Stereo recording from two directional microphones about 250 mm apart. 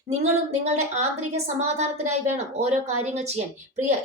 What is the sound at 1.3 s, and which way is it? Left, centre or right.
A woman's voice, right.